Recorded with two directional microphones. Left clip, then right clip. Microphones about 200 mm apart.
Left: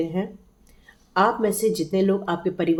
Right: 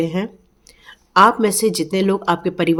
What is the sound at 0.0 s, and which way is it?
Speech, 50° right (ahead or behind).